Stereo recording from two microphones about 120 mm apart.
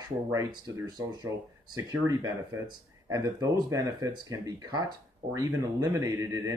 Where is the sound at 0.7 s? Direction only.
35° right (ahead or behind).